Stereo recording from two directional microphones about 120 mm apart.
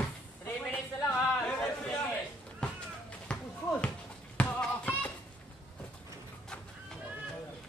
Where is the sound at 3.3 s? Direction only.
5° left (ahead or behind).